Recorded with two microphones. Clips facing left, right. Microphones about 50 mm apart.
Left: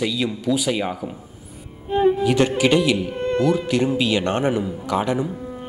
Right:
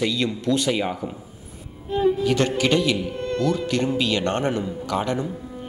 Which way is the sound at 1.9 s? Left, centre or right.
Left.